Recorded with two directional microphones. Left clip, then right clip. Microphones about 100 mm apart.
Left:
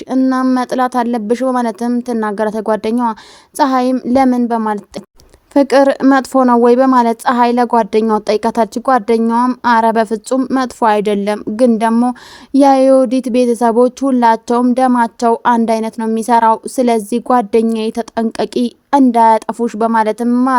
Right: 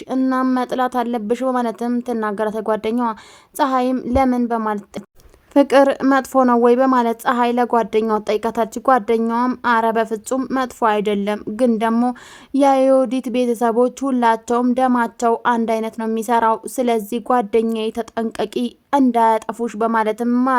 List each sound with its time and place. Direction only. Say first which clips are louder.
0.3 s speech: left 3 dB; 35° left (ahead or behind)
20.2 s speech: left 5 dB; 25° left (ahead or behind)